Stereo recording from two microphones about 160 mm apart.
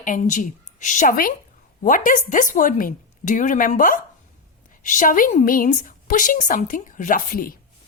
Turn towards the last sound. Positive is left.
turn(degrees=60)  # may be behind; listen again after turning